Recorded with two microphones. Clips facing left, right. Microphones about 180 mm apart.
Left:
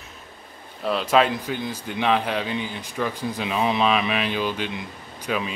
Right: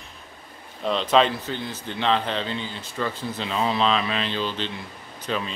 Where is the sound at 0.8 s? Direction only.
5° left (ahead or behind).